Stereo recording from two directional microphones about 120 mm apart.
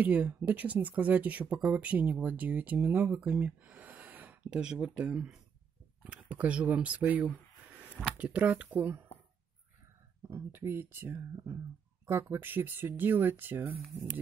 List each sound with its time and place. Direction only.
0.0 s speech: 15° right (ahead or behind)
10.2 s speech: 20° right (ahead or behind)